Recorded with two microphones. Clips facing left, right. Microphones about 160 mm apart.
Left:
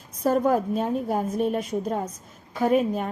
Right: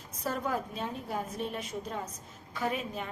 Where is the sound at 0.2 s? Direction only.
45° left (ahead or behind).